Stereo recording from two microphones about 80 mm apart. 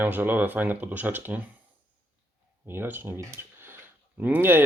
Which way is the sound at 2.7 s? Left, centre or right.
Right.